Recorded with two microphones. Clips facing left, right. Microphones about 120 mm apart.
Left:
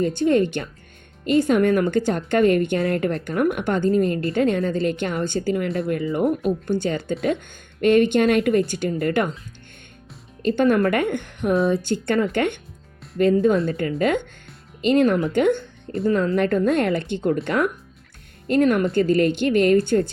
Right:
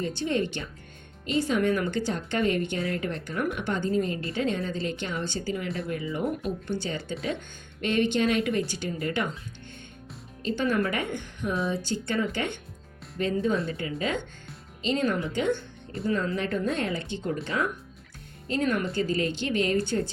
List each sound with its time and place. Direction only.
0.0 s a woman's voice: 50° left (ahead or behind)
10.4 s a woman's voice: 55° left (ahead or behind)